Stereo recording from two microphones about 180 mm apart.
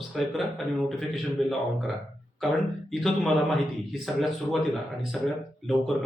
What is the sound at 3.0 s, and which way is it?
Speech, centre (ahead or behind).